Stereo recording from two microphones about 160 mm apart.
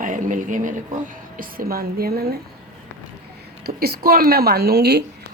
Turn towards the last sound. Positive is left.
turn(degrees=-90)